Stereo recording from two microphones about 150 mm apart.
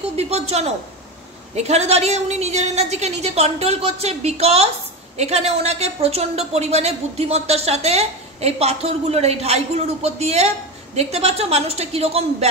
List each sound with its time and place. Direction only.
0.2 s a woman's voice: 45° right (ahead or behind)